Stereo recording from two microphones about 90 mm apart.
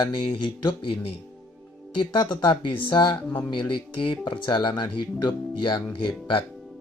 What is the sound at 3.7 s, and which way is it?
Speech, 75° left (ahead or behind).